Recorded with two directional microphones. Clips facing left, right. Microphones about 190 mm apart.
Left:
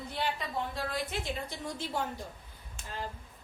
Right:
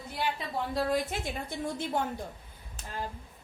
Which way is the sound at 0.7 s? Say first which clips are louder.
Right 7 dB; 45° right (ahead or behind).